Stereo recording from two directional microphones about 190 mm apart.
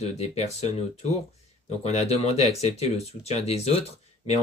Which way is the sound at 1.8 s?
35° left (ahead or behind).